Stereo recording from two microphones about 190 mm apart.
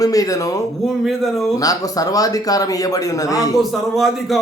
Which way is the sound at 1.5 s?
20° left (ahead or behind).